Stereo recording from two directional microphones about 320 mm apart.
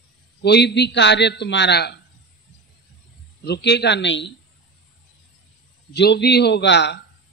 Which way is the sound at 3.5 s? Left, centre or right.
Left.